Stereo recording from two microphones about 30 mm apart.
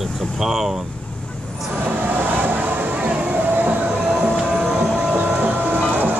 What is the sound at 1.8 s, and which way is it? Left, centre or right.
Vehicle, right.